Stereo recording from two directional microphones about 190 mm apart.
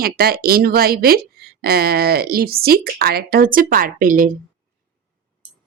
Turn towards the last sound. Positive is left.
turn(degrees=-45)  # may be behind; listen again after turning